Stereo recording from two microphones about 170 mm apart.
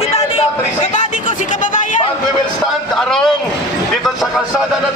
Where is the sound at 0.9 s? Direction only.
50° left (ahead or behind).